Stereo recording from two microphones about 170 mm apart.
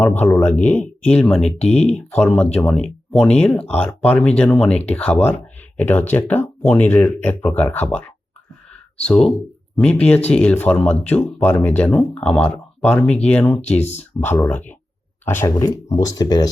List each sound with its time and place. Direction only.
0.2 s speech: 10° left (ahead or behind)
13.8 s speech: 40° left (ahead or behind)
14.3 s speech: 15° left (ahead or behind)